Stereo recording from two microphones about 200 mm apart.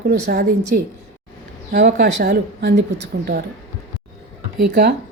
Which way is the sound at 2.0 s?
55° right (ahead or behind).